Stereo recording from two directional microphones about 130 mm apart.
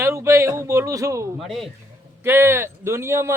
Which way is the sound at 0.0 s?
20° right (ahead or behind).